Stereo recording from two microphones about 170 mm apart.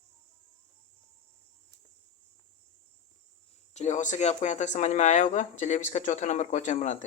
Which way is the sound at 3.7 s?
45° left (ahead or behind).